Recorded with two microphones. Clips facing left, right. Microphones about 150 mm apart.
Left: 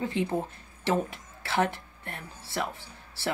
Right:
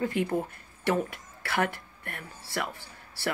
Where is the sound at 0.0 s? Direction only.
20° left (ahead or behind).